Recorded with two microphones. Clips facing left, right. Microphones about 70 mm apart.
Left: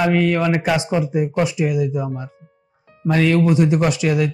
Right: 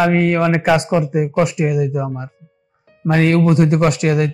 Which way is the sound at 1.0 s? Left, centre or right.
Right.